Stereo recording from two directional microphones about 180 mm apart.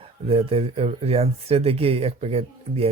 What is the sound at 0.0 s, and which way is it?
Speech, 30° right (ahead or behind).